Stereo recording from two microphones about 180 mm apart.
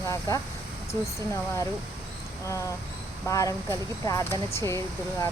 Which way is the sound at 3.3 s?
20° left (ahead or behind).